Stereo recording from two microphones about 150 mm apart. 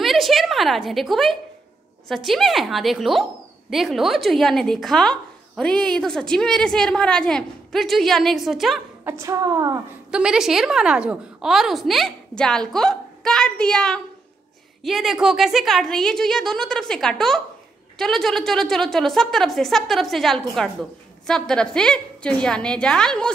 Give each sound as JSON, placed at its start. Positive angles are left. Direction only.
{"t": 0.0, "sound": "a sound", "side_deg": 0}
{"t": 2.0, "sound": "a woman's voice", "side_deg": 0}
{"t": 9.2, "sound": "a woman's voice", "side_deg": -25}
{"t": 10.1, "sound": "a woman's voice", "side_deg": -5}